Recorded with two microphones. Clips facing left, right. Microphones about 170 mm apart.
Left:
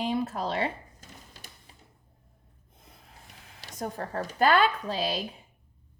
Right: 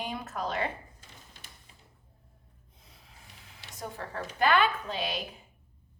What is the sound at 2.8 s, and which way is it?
Snort, 50° left (ahead or behind).